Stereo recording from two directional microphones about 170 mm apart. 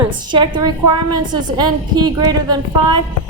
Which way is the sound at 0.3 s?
25° right (ahead or behind).